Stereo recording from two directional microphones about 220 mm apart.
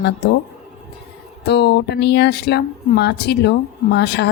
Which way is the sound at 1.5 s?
50° left (ahead or behind).